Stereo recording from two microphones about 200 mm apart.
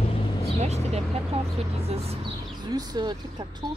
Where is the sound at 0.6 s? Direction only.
35° right (ahead or behind).